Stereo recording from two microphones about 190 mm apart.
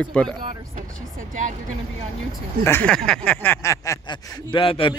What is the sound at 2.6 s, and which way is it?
Speech, 10° left (ahead or behind).